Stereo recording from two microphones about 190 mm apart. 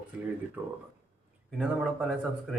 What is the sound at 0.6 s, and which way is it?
Speech, 10° right (ahead or behind).